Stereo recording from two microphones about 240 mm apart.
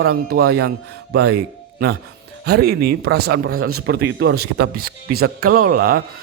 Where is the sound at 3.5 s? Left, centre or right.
Right.